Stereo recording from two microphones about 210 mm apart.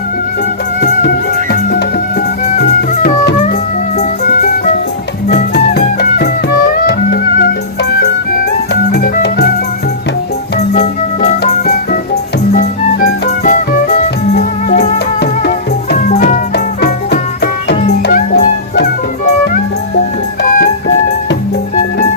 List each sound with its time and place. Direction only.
0.8 s music: 50° left (ahead or behind)
5.3 s music: 50° left (ahead or behind)
10.8 s music: 35° left (ahead or behind)
15.2 s music: 50° left (ahead or behind)
16.0 s music: 35° left (ahead or behind)
16.8 s music: 50° left (ahead or behind)
20.4 s music: 45° left (ahead or behind)